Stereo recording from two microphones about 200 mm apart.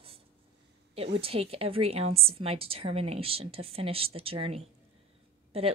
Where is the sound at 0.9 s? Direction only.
30° right (ahead or behind).